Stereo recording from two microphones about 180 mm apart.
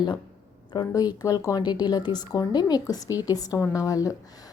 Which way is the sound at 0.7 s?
25° left (ahead or behind).